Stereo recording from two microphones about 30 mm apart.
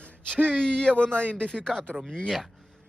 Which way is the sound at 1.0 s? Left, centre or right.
Left.